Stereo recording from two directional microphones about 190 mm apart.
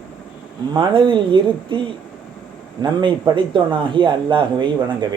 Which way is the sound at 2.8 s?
25° right (ahead or behind).